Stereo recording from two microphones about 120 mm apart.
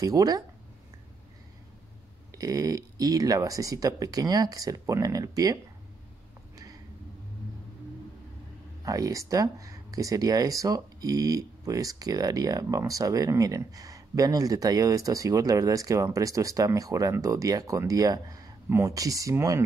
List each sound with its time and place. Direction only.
0.0 s speech: 30° right (ahead or behind)
2.3 s speech: 30° right (ahead or behind)
8.8 s speech: 30° right (ahead or behind)